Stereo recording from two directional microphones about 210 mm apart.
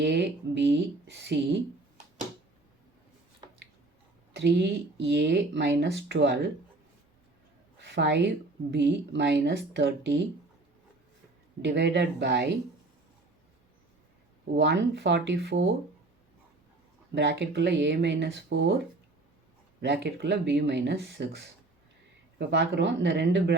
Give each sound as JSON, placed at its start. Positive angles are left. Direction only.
{"t": 0.0, "sound": "speech", "side_deg": -55}
{"t": 4.4, "sound": "speech", "side_deg": -55}
{"t": 7.8, "sound": "a sound", "side_deg": -55}
{"t": 8.7, "sound": "speech", "side_deg": -55}
{"t": 11.6, "sound": "speech", "side_deg": -55}
{"t": 14.5, "sound": "speech", "side_deg": -55}
{"t": 17.2, "sound": "speech", "side_deg": -55}
{"t": 19.8, "sound": "speech", "side_deg": -55}
{"t": 22.4, "sound": "speech", "side_deg": -55}